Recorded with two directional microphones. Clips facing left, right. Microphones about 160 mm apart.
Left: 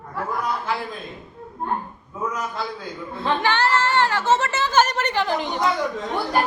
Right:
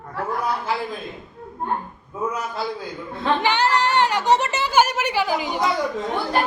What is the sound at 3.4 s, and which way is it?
Speech, 15° right (ahead or behind).